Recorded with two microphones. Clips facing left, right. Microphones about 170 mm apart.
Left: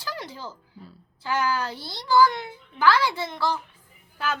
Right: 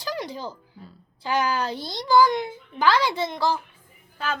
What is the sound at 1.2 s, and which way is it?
A child's voice, 15° right (ahead or behind).